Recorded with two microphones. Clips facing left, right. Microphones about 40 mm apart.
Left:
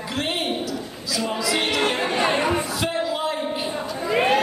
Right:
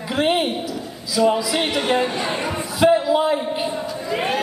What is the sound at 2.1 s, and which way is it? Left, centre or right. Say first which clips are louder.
Speech: left 3 dB; centre.